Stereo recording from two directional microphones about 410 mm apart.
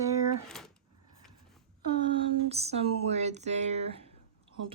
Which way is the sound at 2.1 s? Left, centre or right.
Centre.